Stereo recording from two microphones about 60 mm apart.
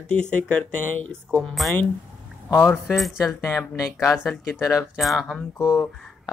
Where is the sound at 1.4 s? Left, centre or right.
Centre.